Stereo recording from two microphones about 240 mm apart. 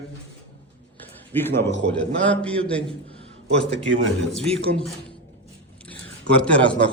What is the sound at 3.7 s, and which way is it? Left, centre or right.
Speech, right.